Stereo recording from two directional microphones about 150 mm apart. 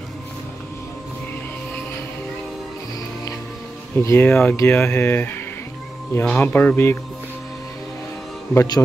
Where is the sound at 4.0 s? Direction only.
15° left (ahead or behind).